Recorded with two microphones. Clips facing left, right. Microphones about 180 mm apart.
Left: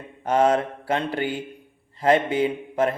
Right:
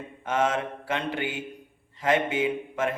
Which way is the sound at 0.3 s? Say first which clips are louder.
Left 6 dB; 35° left (ahead or behind).